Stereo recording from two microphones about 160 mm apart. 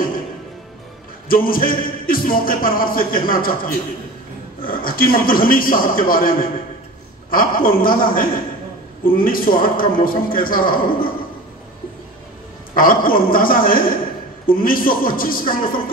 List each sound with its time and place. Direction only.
1.3 s music: 65° left (ahead or behind)
12.7 s music: 60° left (ahead or behind)